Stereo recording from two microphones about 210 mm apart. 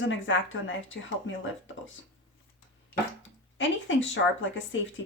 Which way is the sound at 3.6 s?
65° left (ahead or behind).